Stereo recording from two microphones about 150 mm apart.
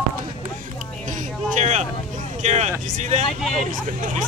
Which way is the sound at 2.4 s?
50° right (ahead or behind).